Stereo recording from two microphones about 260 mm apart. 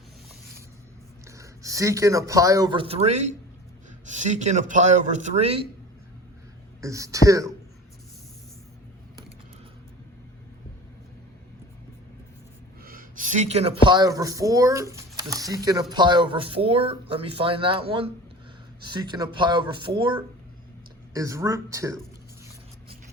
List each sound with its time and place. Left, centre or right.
1.4 s speech: centre
6.8 s speech: centre
12.8 s speech: right; by 21.9 s centre